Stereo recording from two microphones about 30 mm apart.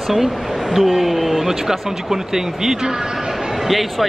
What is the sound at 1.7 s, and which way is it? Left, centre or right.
Speech, centre.